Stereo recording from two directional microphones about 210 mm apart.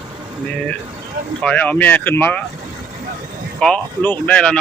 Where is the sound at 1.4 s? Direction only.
5° left (ahead or behind).